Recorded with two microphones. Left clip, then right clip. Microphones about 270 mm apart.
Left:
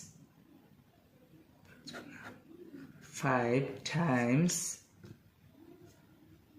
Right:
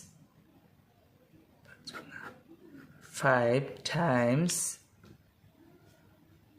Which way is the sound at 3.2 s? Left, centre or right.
Right.